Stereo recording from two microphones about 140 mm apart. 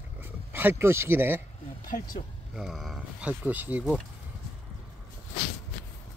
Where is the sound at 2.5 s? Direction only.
Centre (ahead or behind).